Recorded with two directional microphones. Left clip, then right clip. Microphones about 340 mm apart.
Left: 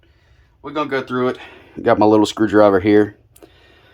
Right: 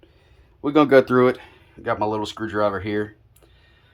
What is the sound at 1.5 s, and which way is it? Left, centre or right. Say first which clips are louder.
Speech: left 10 dB; centre.